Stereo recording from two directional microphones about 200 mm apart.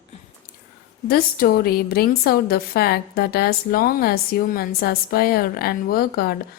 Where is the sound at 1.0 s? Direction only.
50° left (ahead or behind).